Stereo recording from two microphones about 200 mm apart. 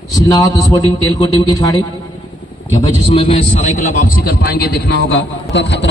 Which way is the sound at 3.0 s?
30° left (ahead or behind).